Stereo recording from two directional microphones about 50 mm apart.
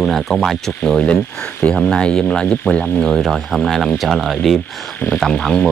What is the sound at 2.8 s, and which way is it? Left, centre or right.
Speech, centre.